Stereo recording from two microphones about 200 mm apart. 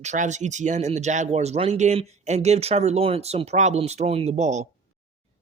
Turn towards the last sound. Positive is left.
turn(degrees=-35)  # may be behind; listen again after turning